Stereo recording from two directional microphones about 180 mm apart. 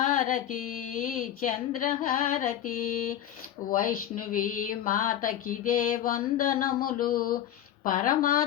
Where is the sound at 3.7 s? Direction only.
50° left (ahead or behind).